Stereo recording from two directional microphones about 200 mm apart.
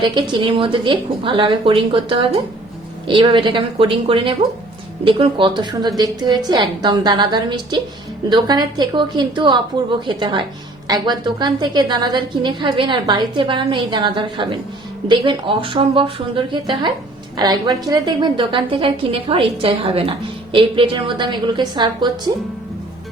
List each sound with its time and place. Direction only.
0.0 s a woman's voice: 25° right (ahead or behind)